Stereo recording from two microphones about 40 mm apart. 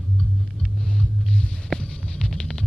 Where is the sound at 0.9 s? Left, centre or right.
Left.